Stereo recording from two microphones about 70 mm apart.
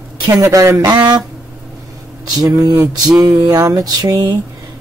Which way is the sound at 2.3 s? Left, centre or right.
Right.